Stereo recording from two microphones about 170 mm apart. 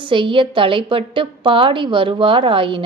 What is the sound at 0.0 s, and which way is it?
A woman's voice, 30° right (ahead or behind).